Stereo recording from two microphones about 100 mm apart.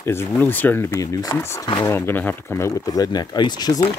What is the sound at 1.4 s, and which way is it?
Speech, 25° left (ahead or behind).